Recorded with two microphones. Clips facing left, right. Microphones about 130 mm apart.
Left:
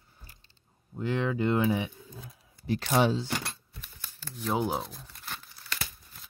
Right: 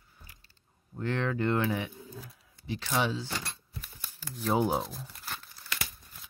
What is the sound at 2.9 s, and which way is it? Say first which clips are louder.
Speech: left 5 dB; 35° left (ahead or behind).